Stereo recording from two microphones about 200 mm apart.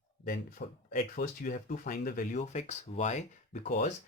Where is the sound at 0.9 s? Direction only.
45° left (ahead or behind).